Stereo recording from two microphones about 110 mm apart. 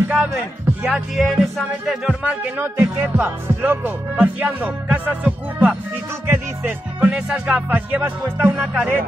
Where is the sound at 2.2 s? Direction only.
10° right (ahead or behind).